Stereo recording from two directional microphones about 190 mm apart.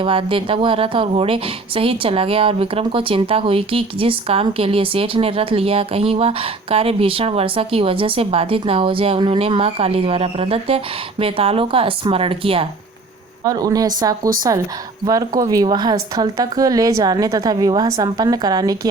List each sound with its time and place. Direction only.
0.0 s a woman's voice: 30° right (ahead or behind)